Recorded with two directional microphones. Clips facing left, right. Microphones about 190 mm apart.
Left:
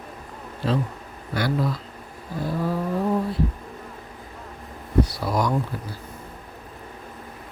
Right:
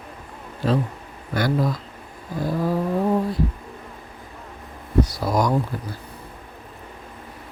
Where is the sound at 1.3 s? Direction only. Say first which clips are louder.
Right 2 dB; 45° right (ahead or behind).